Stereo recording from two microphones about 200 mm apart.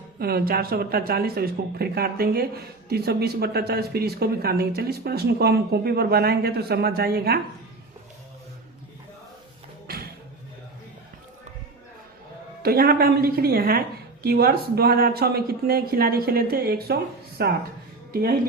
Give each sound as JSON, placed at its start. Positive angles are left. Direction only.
{"t": 0.2, "sound": "speech", "side_deg": -50}
{"t": 9.8, "sound": "music", "side_deg": -50}
{"t": 12.6, "sound": "speech", "side_deg": -50}